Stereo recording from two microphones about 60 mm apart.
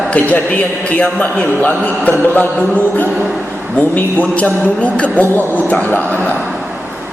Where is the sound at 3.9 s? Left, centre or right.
Left.